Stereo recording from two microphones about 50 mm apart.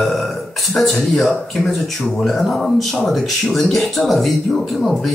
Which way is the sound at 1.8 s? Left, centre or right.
Centre.